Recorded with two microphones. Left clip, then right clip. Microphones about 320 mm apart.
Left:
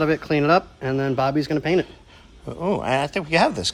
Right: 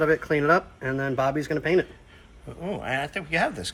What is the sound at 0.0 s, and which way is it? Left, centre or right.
Speech, left.